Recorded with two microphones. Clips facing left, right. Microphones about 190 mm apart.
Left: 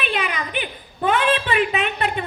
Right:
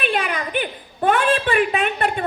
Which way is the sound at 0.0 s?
45° right (ahead or behind).